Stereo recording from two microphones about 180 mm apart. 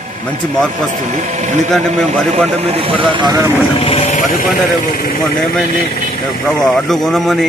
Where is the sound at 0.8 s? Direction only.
40° right (ahead or behind).